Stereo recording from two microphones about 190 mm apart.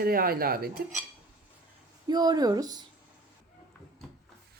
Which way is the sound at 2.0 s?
20° right (ahead or behind).